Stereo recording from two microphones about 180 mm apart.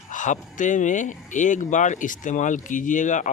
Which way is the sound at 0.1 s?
45° left (ahead or behind).